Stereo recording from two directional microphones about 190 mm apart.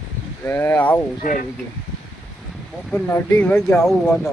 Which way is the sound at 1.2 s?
45° left (ahead or behind).